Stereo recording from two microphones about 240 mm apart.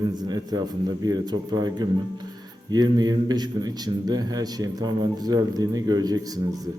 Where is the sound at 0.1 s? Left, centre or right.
Centre.